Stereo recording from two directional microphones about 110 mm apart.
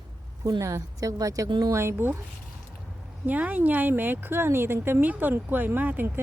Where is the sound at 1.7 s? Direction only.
20° right (ahead or behind).